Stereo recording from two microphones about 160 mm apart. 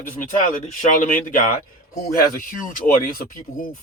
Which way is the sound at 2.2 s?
60° left (ahead or behind).